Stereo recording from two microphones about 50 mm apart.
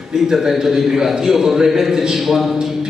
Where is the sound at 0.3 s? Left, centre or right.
Centre.